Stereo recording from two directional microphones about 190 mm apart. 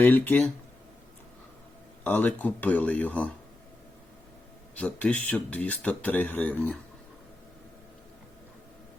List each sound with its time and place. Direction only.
0.0 s speech: 10° left (ahead or behind)
2.0 s speech: 10° left (ahead or behind)
4.7 s speech: 10° left (ahead or behind)